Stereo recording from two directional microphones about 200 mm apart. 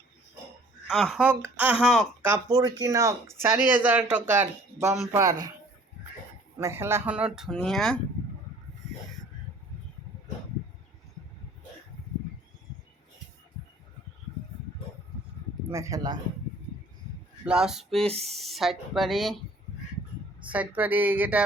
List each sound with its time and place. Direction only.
0.9 s speech: centre (ahead or behind)
2.2 s speech: 15° right (ahead or behind)
6.6 s speech: 15° right (ahead or behind); by 7.9 s centre (ahead or behind)
15.7 s speech: 15° right (ahead or behind)
17.4 s speech: 5° right (ahead or behind)
20.5 s speech: 10° right (ahead or behind)